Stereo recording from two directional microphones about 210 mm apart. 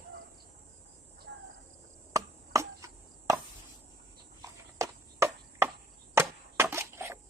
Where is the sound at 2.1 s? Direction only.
15° right (ahead or behind).